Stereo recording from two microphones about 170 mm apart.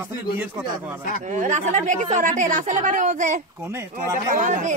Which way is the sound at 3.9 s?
50° right (ahead or behind).